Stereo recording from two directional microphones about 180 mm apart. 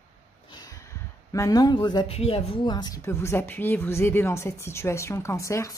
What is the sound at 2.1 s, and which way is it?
A woman's voice, 35° left (ahead or behind).